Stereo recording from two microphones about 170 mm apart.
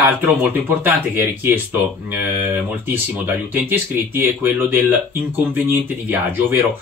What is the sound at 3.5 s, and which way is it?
Speech, 10° right (ahead or behind).